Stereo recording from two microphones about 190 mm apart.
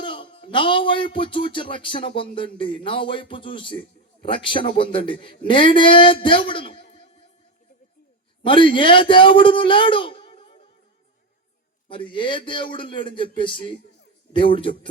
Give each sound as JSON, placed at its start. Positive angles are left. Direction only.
{"t": 0.0, "sound": "speech", "side_deg": 25}
{"t": 8.4, "sound": "a man's voice", "side_deg": 25}
{"t": 11.9, "sound": "speech", "side_deg": 25}